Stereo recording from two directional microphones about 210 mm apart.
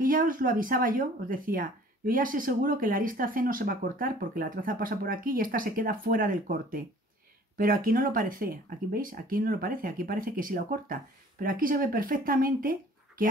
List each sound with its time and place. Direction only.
0.0 s speech: 40° right (ahead or behind)